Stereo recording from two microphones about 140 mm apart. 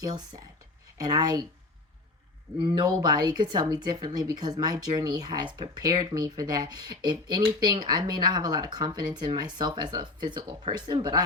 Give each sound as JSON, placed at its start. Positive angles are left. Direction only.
{"t": 0.0, "sound": "speech", "side_deg": -30}
{"t": 2.6, "sound": "speech", "side_deg": -30}